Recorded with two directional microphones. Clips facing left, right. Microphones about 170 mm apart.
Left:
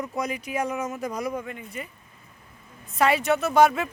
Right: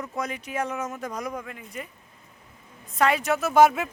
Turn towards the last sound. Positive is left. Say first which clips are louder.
# right 1 dB
turn(degrees=-5)  # may be behind; listen again after turning